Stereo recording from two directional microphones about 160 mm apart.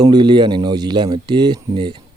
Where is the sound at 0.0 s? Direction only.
25° right (ahead or behind).